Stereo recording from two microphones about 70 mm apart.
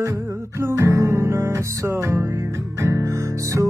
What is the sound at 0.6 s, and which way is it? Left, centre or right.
Music, right.